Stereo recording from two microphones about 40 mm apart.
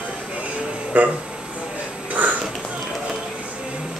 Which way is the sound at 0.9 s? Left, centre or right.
Right.